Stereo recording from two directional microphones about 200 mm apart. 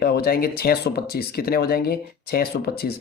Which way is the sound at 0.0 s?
50° left (ahead or behind).